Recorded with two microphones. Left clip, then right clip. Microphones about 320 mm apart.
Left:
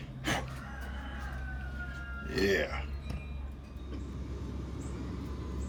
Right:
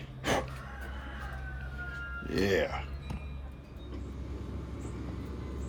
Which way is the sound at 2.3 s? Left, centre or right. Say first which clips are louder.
Right 1 dB; centre.